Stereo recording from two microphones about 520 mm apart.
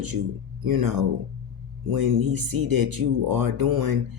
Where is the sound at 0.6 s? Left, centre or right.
Right.